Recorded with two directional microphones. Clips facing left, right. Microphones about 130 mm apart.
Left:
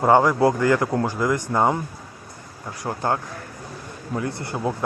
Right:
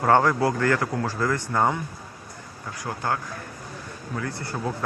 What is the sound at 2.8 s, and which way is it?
Speech, 25° left (ahead or behind).